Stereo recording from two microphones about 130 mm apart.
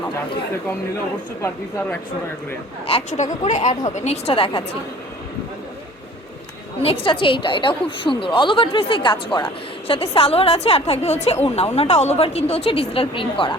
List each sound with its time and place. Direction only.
2.9 s a woman's voice: 50° left (ahead or behind)
3.4 s speech: 60° left (ahead or behind); by 4.6 s 45° left (ahead or behind)
7.0 s a woman's voice: 40° left (ahead or behind)